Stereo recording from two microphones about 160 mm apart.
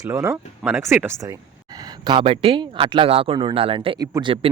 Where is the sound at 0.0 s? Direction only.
20° right (ahead or behind).